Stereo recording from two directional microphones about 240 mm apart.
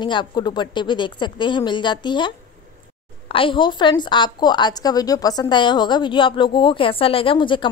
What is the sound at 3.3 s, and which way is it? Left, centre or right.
A woman's voice, left.